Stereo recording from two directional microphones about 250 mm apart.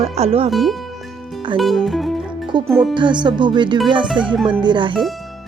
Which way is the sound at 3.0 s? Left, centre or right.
Centre.